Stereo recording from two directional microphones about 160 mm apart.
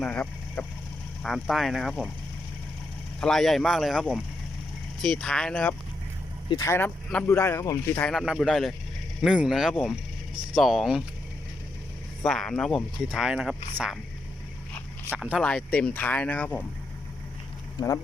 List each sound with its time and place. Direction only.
0.0 s speech: 5° left (ahead or behind)
3.2 s speech: 5° left (ahead or behind)
6.5 s speech: 20° left (ahead or behind)
7.9 s speech: 5° left (ahead or behind)
12.2 s speech: 5° left (ahead or behind)
15.1 s speech: 5° right (ahead or behind)
17.7 s speech: 20° left (ahead or behind)